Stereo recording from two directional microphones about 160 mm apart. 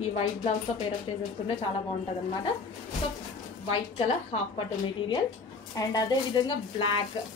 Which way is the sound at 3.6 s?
40° left (ahead or behind).